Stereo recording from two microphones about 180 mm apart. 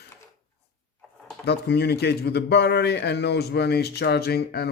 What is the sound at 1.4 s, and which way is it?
Speech, 70° left (ahead or behind).